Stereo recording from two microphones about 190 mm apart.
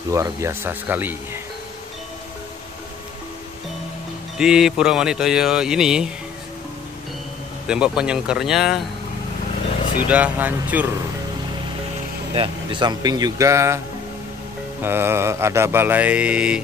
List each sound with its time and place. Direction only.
0.1 s mantra: 15° right (ahead or behind)
4.4 s speech: 5° right (ahead or behind)
7.6 s speech: 5° right (ahead or behind)
10.0 s mantra: 5° right (ahead or behind)
12.4 s speech: 25° right (ahead or behind)
14.8 s mantra: 10° right (ahead or behind)